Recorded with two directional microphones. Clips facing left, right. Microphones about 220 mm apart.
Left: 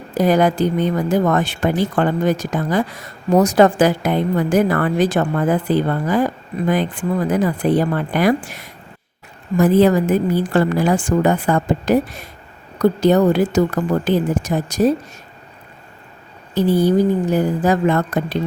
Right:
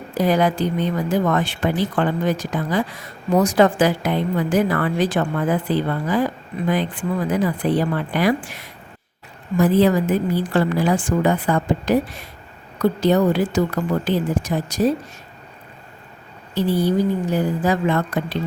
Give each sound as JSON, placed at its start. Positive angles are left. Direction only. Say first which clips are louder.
{"t": 0.2, "sound": "speech", "louder": "left 3 dB", "side_deg": 45}
{"t": 16.6, "sound": "speech", "louder": "left 4 dB", "side_deg": 45}